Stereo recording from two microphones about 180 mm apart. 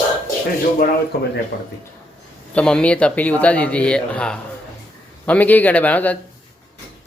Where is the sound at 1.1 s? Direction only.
60° left (ahead or behind).